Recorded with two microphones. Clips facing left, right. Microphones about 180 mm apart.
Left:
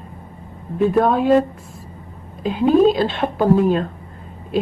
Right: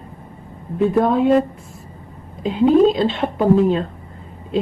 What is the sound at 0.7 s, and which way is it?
Speech, 25° right (ahead or behind).